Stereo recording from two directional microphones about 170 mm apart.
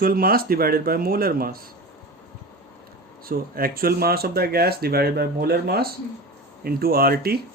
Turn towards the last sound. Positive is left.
turn(degrees=-65)  # may be behind; listen again after turning